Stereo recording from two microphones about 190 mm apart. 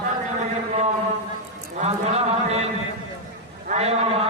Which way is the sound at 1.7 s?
35° right (ahead or behind).